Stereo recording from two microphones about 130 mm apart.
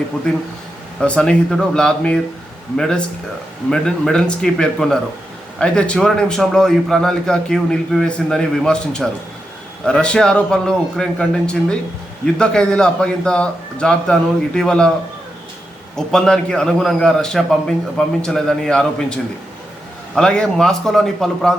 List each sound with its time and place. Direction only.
0.9 s a man's voice: 5° left (ahead or behind)
16.0 s a man's voice: 5° left (ahead or behind)